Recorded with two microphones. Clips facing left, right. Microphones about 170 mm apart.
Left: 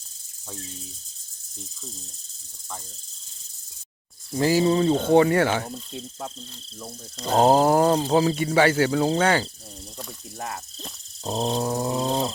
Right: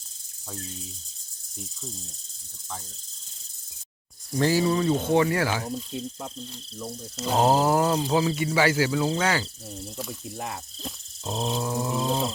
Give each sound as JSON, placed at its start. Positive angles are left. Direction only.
{"t": 4.4, "sound": "speech", "side_deg": 10}
{"t": 4.6, "sound": "speech", "side_deg": 30}
{"t": 5.9, "sound": "speech", "side_deg": 0}
{"t": 7.3, "sound": "speech", "side_deg": 30}
{"t": 10.0, "sound": "speech", "side_deg": -5}
{"t": 11.2, "sound": "speech", "side_deg": 35}